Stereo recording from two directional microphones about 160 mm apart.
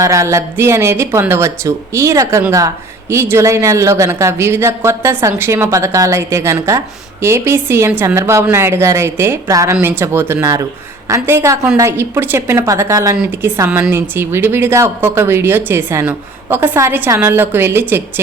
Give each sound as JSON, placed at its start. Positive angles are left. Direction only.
{"t": 0.0, "sound": "speech", "side_deg": -20}